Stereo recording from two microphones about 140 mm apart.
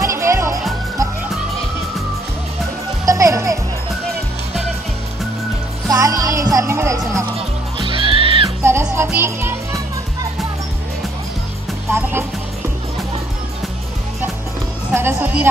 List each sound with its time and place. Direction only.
0.0 s music: 20° right (ahead or behind)
3.1 s music: 25° right (ahead or behind)
5.9 s music: 25° right (ahead or behind)
7.3 s music: 40° right (ahead or behind)
8.6 s music: 20° right (ahead or behind)
11.9 s music: 15° right (ahead or behind)
15.0 s music: 20° right (ahead or behind)